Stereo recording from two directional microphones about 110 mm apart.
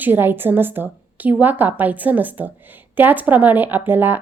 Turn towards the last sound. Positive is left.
turn(degrees=-20)  # may be behind; listen again after turning